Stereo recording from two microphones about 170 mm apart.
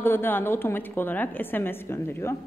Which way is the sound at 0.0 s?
15° left (ahead or behind).